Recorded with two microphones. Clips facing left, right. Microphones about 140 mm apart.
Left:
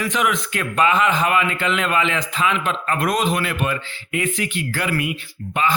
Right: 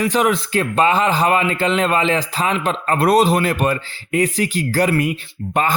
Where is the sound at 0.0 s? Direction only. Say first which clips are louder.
Right 5 dB; 35° right (ahead or behind).